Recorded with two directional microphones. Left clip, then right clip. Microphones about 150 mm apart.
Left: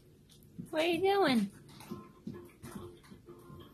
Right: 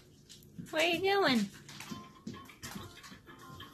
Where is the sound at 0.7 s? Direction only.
30° left (ahead or behind).